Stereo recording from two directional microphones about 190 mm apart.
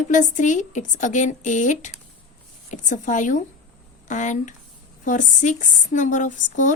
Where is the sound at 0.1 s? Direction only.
40° left (ahead or behind).